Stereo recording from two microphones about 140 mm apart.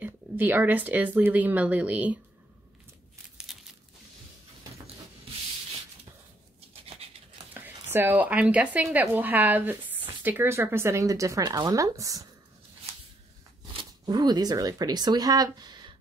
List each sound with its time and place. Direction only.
0.0 s speech: 15° right (ahead or behind)
3.4 s crumpling: 5° right (ahead or behind)
7.0 s a sound: 45° right (ahead or behind)
7.6 s speech: 15° right (ahead or behind)
13.7 s speech: 30° right (ahead or behind)